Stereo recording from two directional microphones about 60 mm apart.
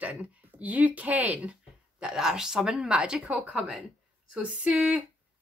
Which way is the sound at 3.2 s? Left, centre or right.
Right.